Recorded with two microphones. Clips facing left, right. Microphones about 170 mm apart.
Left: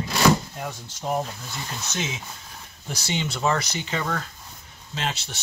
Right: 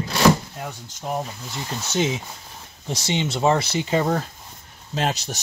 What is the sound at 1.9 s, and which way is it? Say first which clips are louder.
Speech: right 10 dB; 35° right (ahead or behind).